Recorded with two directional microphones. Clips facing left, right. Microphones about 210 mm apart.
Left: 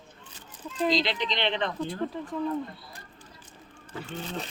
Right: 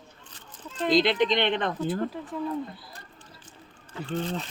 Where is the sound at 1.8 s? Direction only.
5° right (ahead or behind).